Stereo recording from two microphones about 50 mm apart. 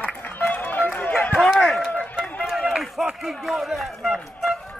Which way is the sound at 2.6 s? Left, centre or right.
Centre.